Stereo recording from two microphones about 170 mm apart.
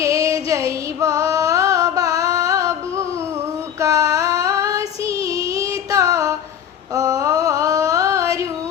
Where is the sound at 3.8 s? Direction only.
20° right (ahead or behind).